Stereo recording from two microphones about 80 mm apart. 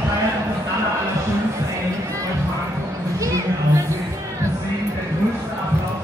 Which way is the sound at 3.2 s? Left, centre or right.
Right.